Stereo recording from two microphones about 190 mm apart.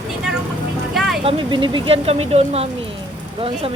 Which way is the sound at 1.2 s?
25° right (ahead or behind).